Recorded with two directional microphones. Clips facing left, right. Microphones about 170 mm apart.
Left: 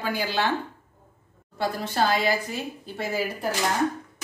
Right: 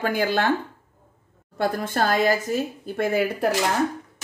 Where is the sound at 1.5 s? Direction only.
50° right (ahead or behind).